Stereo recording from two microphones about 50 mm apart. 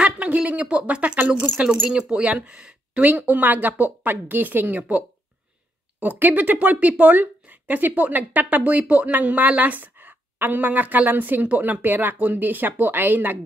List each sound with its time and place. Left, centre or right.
0.0 s a sound: right
0.5 s speech: right
1.9 s speech: centre
3.0 s speech: right